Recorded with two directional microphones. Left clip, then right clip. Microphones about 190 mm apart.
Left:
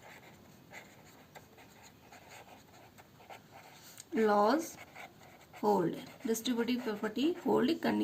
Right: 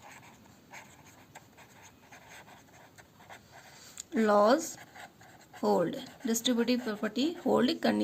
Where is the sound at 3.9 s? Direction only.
40° right (ahead or behind).